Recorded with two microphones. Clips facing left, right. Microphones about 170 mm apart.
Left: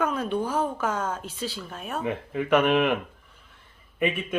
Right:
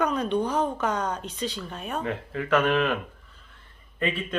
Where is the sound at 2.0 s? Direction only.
15° left (ahead or behind).